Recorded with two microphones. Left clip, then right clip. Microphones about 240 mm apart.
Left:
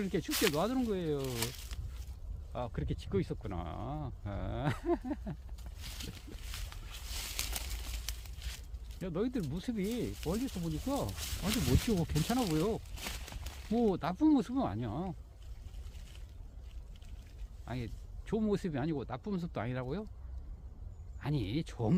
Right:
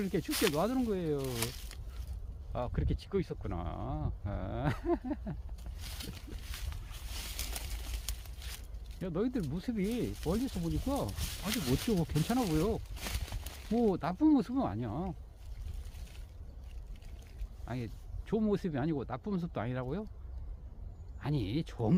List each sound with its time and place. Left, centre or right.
0.0 s speech: centre
1.3 s speech: centre
6.1 s a sound: centre
8.0 s a sound: centre
9.0 s speech: centre
17.7 s speech: centre
21.2 s speech: centre